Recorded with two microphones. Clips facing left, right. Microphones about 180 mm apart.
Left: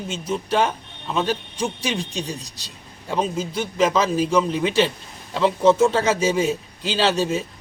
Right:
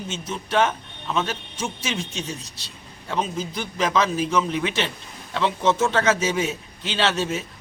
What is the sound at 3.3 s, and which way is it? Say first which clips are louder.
Speech: left 5 dB; 5° left (ahead or behind).